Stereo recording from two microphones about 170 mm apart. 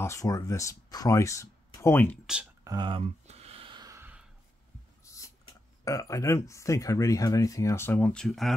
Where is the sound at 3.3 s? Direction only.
40° right (ahead or behind); by 4.1 s 20° right (ahead or behind).